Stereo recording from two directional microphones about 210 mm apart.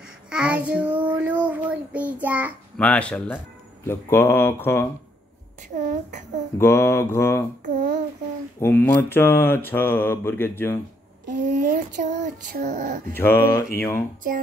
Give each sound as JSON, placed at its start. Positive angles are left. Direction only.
{"t": 0.3, "sound": "child singing", "side_deg": -5}
{"t": 2.8, "sound": "mantra", "side_deg": 5}
{"t": 5.8, "sound": "female singing", "side_deg": -35}
{"t": 6.6, "sound": "mantra", "side_deg": 10}
{"t": 7.6, "sound": "a sound", "side_deg": -35}
{"t": 8.5, "sound": "mantra", "side_deg": 10}
{"t": 11.5, "sound": "female singing", "side_deg": -40}
{"t": 13.1, "sound": "mantra", "side_deg": 10}